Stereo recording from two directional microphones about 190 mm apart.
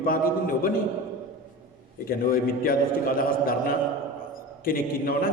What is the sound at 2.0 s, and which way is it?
A man's voice, 50° left (ahead or behind).